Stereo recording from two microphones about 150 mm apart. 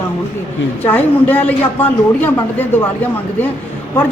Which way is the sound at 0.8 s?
10° left (ahead or behind).